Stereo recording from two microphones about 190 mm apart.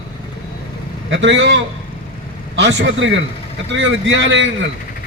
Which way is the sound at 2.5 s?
75° right (ahead or behind).